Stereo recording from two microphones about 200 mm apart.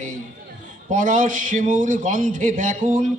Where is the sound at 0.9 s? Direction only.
40° right (ahead or behind).